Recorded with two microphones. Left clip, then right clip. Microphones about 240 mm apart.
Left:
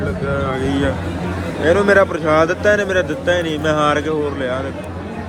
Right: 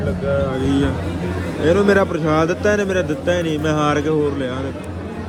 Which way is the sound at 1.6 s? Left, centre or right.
Right.